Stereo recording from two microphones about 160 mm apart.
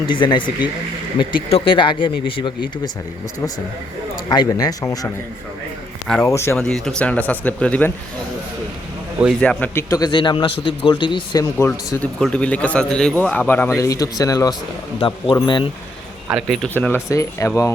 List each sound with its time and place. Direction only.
0.1 s speech: 30° left (ahead or behind)
1.5 s speech: 35° left (ahead or behind)
4.3 s speech: 25° left (ahead or behind)
6.2 s a man's voice: 15° left (ahead or behind)
6.6 s a man's voice: 5° left (ahead or behind)
9.4 s a man's voice: 10° left (ahead or behind)
9.9 s speech: 25° left (ahead or behind)
11.5 s a man's voice: 15° left (ahead or behind)
14.9 s speech: 30° left (ahead or behind)
16.3 s a man's voice: centre (ahead or behind); by 17.7 s 20° left (ahead or behind)